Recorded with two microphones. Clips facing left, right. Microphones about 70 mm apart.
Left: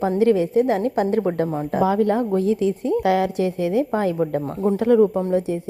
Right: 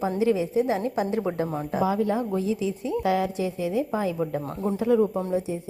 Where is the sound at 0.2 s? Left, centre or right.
Left.